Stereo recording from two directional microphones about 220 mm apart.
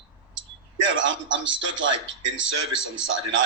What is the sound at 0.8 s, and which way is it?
A man's voice, 60° right (ahead or behind).